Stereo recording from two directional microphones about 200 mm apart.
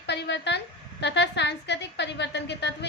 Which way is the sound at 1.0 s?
60° left (ahead or behind).